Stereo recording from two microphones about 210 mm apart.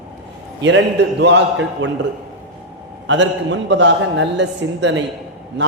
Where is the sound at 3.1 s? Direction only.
60° right (ahead or behind).